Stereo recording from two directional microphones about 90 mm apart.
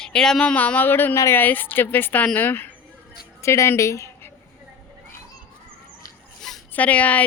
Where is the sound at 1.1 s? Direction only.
35° left (ahead or behind).